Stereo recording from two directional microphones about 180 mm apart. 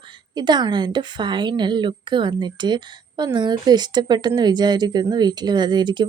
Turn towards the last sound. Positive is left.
turn(degrees=-25)  # may be behind; listen again after turning